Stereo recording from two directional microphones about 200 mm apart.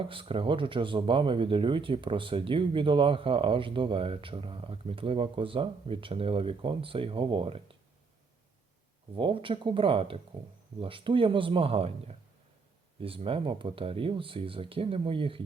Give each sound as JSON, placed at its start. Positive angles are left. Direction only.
{"t": 0.0, "sound": "speech", "side_deg": -25}
{"t": 9.1, "sound": "speech", "side_deg": -25}